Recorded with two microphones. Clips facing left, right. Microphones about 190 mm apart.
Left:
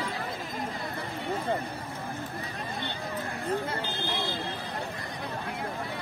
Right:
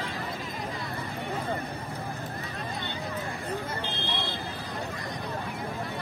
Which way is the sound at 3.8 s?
70° right (ahead or behind).